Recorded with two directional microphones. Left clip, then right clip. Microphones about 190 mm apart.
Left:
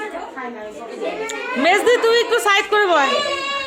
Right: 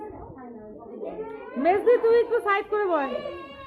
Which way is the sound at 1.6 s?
5° left (ahead or behind).